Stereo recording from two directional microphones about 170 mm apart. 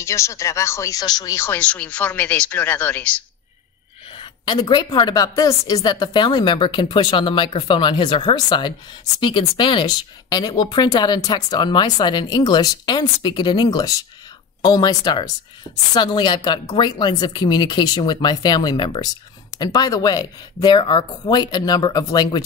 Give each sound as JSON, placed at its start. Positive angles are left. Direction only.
{"t": 0.0, "sound": "speech", "side_deg": 15}
{"t": 4.1, "sound": "speech", "side_deg": 30}